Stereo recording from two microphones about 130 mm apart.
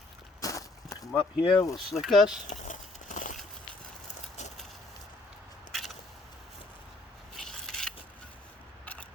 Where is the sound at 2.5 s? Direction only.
75° left (ahead or behind).